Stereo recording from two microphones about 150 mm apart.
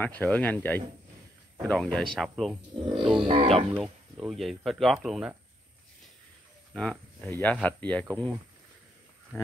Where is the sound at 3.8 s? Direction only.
Centre (ahead or behind).